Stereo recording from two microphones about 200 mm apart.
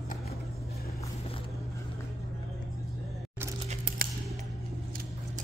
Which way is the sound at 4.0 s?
45° right (ahead or behind).